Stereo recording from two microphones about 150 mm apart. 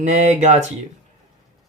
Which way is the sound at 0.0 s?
50° right (ahead or behind).